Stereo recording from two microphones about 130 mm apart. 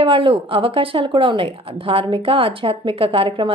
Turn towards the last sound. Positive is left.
turn(degrees=-45)  # may be behind; listen again after turning